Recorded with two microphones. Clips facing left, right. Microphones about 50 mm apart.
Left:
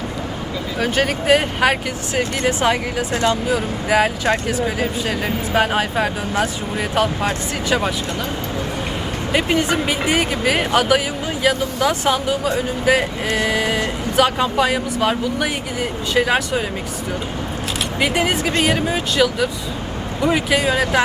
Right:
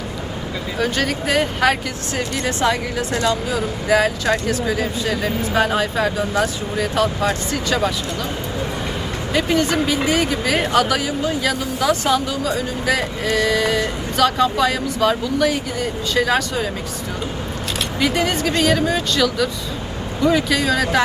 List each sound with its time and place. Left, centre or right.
0.8 s speech: centre
3.1 s speech: left
3.8 s speech: left
9.3 s speech: left
18.0 s speech: centre